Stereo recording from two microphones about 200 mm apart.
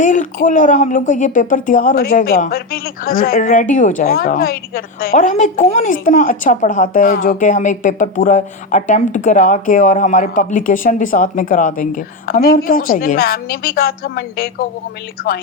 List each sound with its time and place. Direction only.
0.0 s a woman's voice: 40° left (ahead or behind)